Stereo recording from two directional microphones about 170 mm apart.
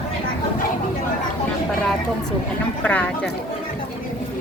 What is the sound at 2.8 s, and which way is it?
Speech, 10° left (ahead or behind).